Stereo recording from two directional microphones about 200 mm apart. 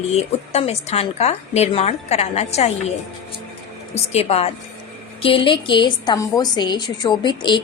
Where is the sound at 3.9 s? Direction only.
30° left (ahead or behind).